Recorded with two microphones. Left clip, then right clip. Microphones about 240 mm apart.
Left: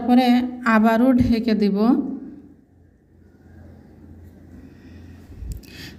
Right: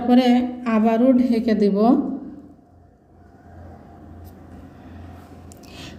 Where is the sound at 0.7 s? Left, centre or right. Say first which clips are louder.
Left 1 dB; left.